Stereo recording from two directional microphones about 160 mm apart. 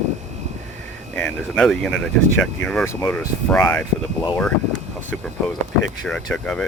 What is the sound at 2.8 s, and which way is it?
Speech, 20° left (ahead or behind).